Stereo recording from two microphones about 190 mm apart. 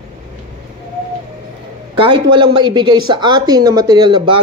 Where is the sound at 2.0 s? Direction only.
25° right (ahead or behind).